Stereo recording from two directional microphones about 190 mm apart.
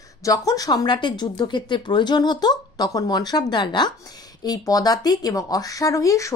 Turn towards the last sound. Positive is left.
turn(degrees=15)  # may be behind; listen again after turning